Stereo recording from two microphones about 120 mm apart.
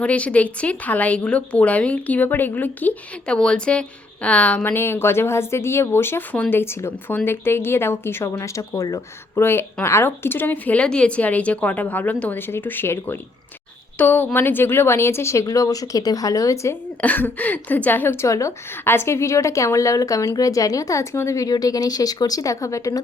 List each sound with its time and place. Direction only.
0.0 s a woman's voice: 10° left (ahead or behind); by 16.7 s 25° left (ahead or behind)
17.0 s a woman's voice: 15° left (ahead or behind)